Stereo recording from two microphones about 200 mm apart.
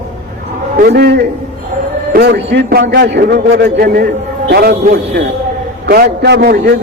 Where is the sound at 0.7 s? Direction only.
50° right (ahead or behind).